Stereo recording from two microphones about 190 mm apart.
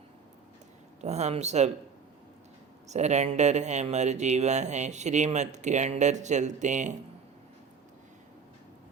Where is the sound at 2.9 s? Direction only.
35° right (ahead or behind).